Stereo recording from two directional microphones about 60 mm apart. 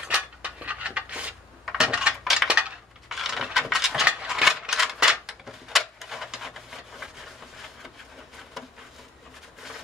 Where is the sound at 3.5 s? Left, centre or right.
Centre.